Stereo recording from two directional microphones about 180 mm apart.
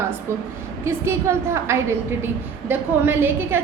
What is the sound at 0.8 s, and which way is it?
A woman's voice, 15° right (ahead or behind).